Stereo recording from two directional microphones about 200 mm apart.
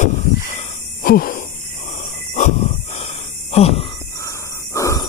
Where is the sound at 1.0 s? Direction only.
45° left (ahead or behind).